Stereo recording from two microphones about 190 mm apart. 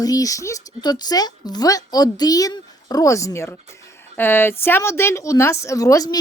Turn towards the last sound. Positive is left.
turn(degrees=20)  # may be behind; listen again after turning